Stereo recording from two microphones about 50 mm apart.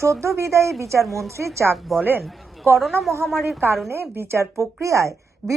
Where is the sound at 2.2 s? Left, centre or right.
Centre.